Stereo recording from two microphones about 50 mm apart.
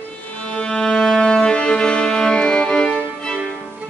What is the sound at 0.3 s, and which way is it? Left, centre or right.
Music, centre.